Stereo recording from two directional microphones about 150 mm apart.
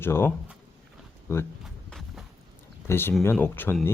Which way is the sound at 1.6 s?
Centre (ahead or behind).